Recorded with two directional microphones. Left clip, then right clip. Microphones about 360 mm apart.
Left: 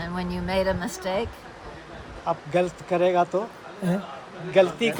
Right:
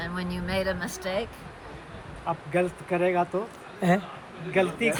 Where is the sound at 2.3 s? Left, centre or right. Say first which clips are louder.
Left 3 dB; centre.